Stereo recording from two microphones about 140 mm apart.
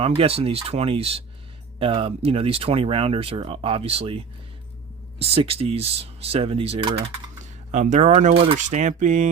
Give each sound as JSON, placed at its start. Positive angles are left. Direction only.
{"t": 0.0, "sound": "speech", "side_deg": -45}
{"t": 5.2, "sound": "speech", "side_deg": -45}
{"t": 7.7, "sound": "speech", "side_deg": -60}